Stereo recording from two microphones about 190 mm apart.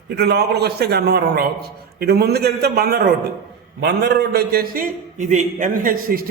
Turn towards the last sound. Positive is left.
turn(degrees=-50)  # may be behind; listen again after turning